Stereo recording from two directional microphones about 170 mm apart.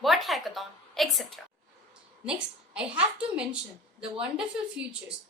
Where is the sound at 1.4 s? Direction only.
Centre (ahead or behind).